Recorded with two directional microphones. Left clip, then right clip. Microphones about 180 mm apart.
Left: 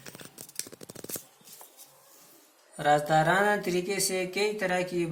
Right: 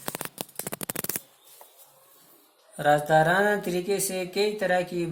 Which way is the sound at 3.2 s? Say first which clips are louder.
Right 2 dB; 60° right (ahead or behind).